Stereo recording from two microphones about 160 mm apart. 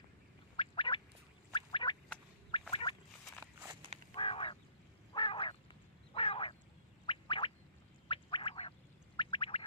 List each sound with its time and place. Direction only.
0.6 s gargling: 30° left (ahead or behind)
1.5 s a sound: 30° left (ahead or behind)
4.1 s goose: 35° left (ahead or behind)
5.1 s frog: 30° left (ahead or behind)
6.1 s quack: 35° left (ahead or behind)
7.1 s a sound: 30° left (ahead or behind)